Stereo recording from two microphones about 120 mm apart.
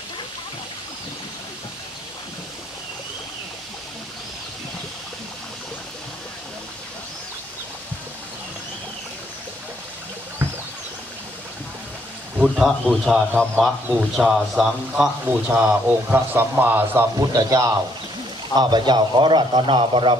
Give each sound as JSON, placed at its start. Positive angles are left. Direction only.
{"t": 12.4, "sound": "a man's voice", "side_deg": -5}
{"t": 17.3, "sound": "a man's voice", "side_deg": -30}